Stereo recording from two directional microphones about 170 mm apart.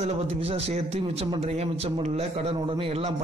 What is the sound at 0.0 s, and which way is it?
A man's voice, 35° right (ahead or behind).